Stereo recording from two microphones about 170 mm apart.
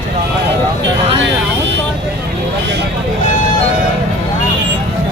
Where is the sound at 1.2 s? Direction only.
90° right.